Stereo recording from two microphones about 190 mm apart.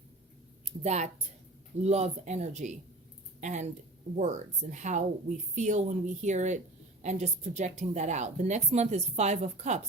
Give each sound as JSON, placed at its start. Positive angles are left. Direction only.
{"t": 0.6, "sound": "a woman's voice", "side_deg": -35}